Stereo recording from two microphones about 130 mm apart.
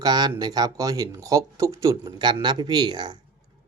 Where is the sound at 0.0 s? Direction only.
30° right (ahead or behind).